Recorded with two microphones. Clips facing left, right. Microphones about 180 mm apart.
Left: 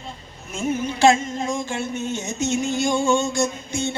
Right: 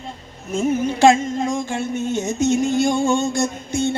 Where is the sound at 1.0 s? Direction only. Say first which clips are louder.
Right 2 dB; 50° right (ahead or behind).